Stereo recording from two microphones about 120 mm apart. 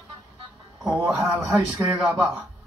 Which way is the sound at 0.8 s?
5° right (ahead or behind).